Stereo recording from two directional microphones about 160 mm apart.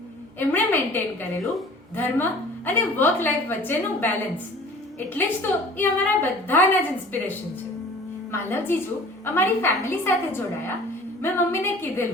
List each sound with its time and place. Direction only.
0.3 s a woman's voice: 10° left (ahead or behind)
1.4 s speech: centre (ahead or behind)
2.0 s a woman's voice: 15° left (ahead or behind)